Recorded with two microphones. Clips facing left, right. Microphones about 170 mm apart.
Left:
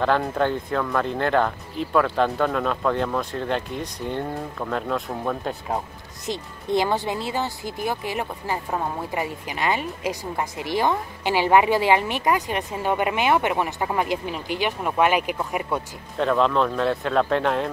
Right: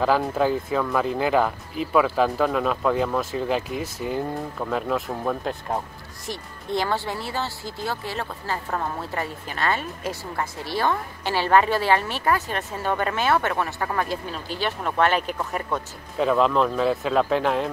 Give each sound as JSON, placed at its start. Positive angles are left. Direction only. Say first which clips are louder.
{"t": 0.0, "sound": "speech", "louder": "right 1 dB", "side_deg": -5}
{"t": 6.2, "sound": "speech", "louder": "left 4 dB", "side_deg": 20}
{"t": 16.2, "sound": "speech", "louder": "even", "side_deg": -5}